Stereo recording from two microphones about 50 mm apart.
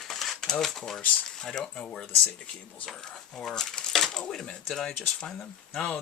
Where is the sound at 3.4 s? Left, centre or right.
Centre.